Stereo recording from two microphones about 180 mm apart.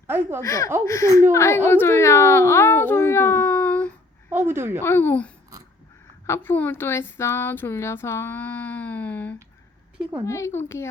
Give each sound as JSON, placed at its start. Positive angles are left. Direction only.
{"t": 0.1, "sound": "a woman's voice", "side_deg": -10}
{"t": 0.4, "sound": "speech", "side_deg": 15}
{"t": 4.3, "sound": "a woman's voice", "side_deg": -15}
{"t": 4.8, "sound": "speech", "side_deg": 10}